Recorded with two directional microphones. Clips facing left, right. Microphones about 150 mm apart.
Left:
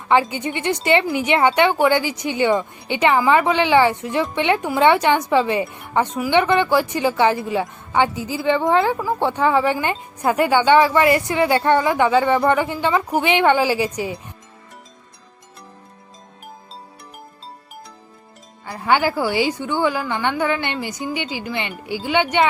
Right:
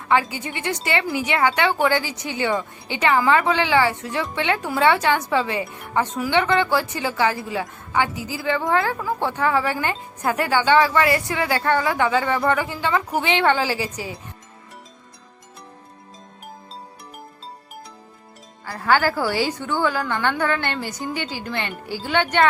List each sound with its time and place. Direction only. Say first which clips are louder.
0.1 s a woman's voice: left 3 dB; 20° left (ahead or behind)
18.6 s a woman's voice: left 1 dB; 20° left (ahead or behind)